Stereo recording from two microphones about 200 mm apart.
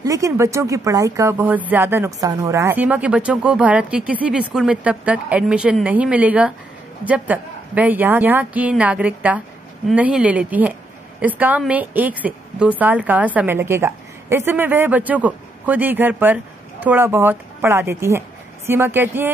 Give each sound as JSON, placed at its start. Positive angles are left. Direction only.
{"t": 0.0, "sound": "a woman's voice", "side_deg": -15}